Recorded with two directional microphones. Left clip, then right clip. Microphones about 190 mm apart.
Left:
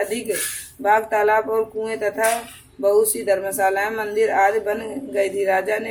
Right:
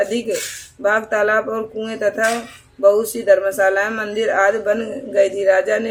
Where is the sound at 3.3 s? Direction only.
25° right (ahead or behind).